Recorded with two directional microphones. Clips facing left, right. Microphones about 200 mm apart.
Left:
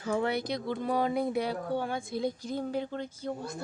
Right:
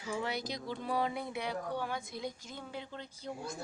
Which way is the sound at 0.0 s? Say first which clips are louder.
Left 7 dB; 55° left (ahead or behind).